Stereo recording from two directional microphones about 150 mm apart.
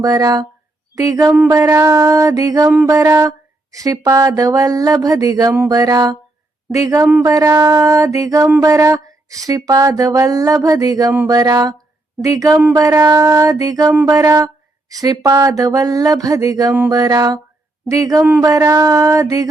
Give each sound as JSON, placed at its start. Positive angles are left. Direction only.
{"t": 0.0, "sound": "speech", "side_deg": -25}